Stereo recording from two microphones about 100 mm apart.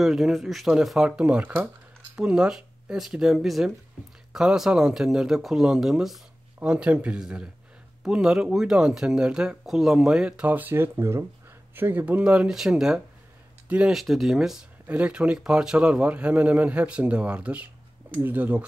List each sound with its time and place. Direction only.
0.0 s a man's voice: centre (ahead or behind)
13.9 s a man's voice: centre (ahead or behind)